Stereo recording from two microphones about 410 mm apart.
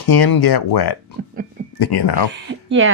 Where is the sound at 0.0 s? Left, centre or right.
Left.